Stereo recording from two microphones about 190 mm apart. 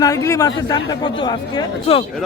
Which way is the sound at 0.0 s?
15° left (ahead or behind).